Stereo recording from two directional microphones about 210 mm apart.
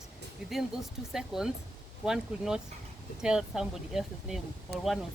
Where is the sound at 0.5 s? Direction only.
Centre (ahead or behind).